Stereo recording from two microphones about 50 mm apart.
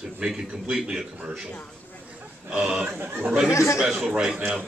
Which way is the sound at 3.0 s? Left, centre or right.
Right.